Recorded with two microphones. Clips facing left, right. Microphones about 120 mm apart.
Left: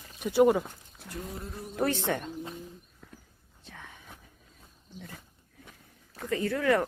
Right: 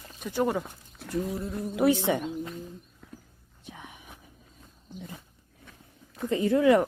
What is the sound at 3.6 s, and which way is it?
Whispering, 15° right (ahead or behind).